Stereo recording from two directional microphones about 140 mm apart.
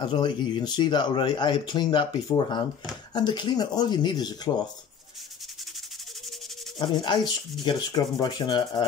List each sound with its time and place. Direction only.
0.0 s speech: 35° left (ahead or behind)
6.8 s speech: 30° left (ahead or behind)